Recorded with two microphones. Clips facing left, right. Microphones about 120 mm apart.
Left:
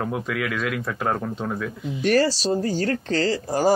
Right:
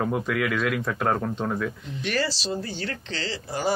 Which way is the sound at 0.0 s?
Centre (ahead or behind).